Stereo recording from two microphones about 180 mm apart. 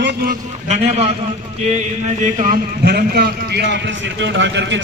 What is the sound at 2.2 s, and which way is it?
Speech, 40° right (ahead or behind).